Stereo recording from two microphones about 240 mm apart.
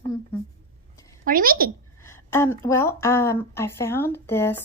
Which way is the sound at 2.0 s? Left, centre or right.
Centre.